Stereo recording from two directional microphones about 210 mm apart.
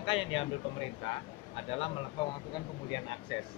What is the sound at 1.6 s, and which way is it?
Speech, 30° left (ahead or behind).